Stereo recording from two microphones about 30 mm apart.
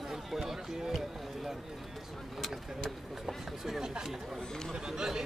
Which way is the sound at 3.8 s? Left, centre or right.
Right.